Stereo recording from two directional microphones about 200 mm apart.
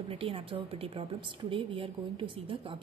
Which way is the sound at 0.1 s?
25° right (ahead or behind).